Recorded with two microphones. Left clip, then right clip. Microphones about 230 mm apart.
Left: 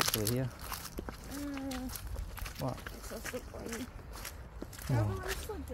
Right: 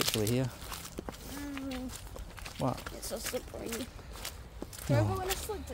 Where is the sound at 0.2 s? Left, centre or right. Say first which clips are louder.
Right 3 dB; right.